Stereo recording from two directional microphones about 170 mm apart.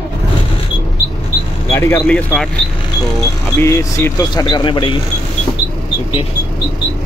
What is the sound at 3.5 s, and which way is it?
Speech, 15° left (ahead or behind).